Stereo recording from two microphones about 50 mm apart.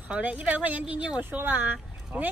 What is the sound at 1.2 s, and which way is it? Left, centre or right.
Speech, right.